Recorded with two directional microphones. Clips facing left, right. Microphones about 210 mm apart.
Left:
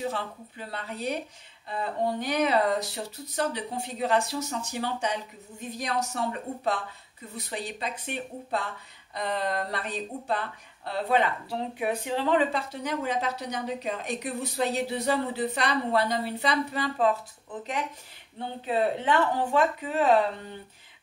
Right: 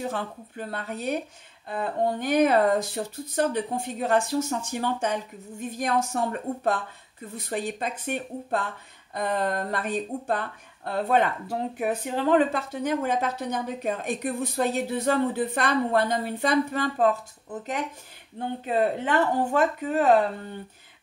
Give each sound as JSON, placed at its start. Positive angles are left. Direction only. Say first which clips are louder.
{"t": 0.1, "sound": "speech", "louder": "right 2 dB", "side_deg": -50}
{"t": 18.7, "sound": "speech", "louder": "right 1 dB", "side_deg": -45}